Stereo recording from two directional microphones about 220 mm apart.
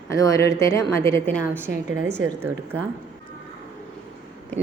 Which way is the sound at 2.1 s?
10° right (ahead or behind).